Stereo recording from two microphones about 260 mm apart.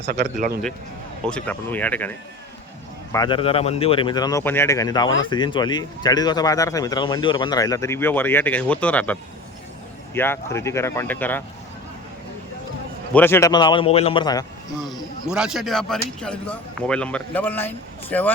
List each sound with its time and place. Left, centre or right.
0.1 s speech: right
1.2 s speech: centre
3.1 s speech: centre
10.2 s speech: centre
13.1 s speech: centre
14.8 s speech: centre